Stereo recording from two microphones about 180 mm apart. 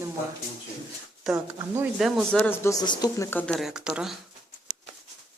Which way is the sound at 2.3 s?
10° left (ahead or behind).